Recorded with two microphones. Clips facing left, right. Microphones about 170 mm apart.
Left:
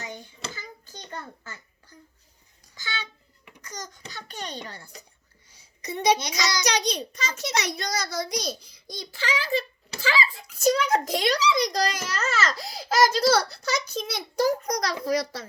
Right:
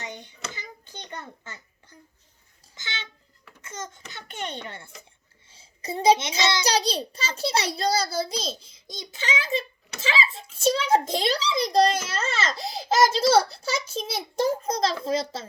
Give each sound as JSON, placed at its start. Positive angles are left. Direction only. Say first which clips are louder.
{"t": 0.5, "sound": "hands", "louder": "right 1 dB", "side_deg": -20}
{"t": 2.7, "sound": "a sound", "louder": "left 3 dB", "side_deg": -20}
{"t": 4.3, "sound": "a child's voice", "louder": "right 3 dB", "side_deg": -25}